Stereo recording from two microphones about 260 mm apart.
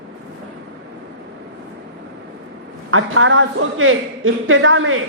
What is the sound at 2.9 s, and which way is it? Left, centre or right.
A man's voice, right.